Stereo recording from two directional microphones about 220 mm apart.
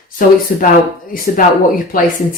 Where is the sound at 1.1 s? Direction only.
40° left (ahead or behind).